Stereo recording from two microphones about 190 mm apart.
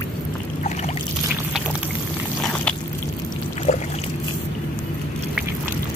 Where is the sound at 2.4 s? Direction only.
5° left (ahead or behind).